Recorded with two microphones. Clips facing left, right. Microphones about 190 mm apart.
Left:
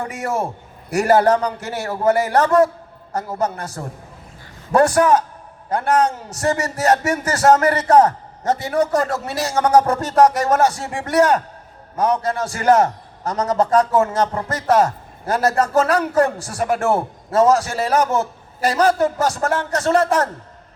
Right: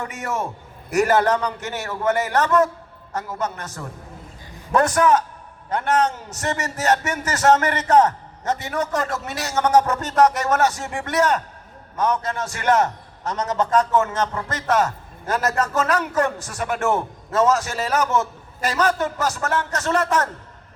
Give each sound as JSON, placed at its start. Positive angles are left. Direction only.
{"t": 0.0, "sound": "a man's voice", "side_deg": 30}